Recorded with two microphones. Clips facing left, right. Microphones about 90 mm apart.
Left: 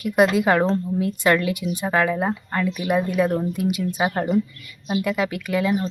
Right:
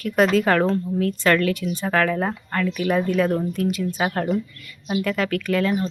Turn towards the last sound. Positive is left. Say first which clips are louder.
# even
turn(degrees=10)  # may be behind; listen again after turning